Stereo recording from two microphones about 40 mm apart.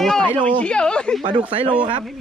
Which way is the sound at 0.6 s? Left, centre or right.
Left.